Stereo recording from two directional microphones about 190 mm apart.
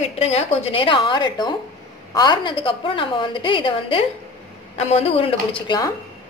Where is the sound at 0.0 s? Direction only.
35° left (ahead or behind).